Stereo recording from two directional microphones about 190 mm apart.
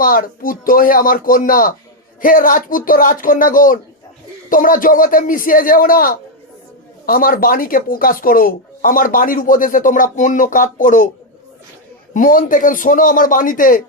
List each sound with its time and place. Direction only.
0.0 s speech: 50° left (ahead or behind)
12.1 s speech: 45° left (ahead or behind)